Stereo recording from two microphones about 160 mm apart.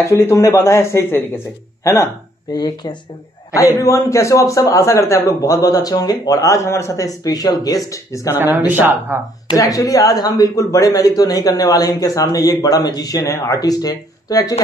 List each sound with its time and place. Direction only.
0.0 s speech: 20° left (ahead or behind)
2.5 s speech: 25° left (ahead or behind)
8.4 s speech: 10° right (ahead or behind)
9.6 s speech: 20° left (ahead or behind)